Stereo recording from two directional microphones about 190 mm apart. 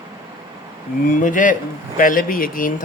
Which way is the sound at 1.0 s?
45° left (ahead or behind).